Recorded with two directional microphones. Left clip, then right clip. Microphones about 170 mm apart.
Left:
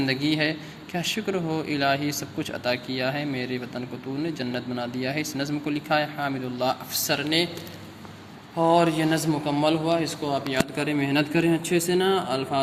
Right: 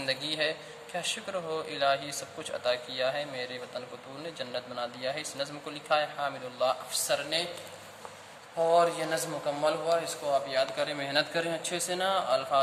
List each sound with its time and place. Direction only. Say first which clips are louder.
0.0 s speech: left 6 dB; 10° left (ahead or behind)
8.6 s speech: left 4 dB; 20° left (ahead or behind)